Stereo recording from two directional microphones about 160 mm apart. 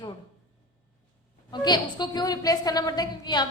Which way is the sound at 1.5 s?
25° left (ahead or behind).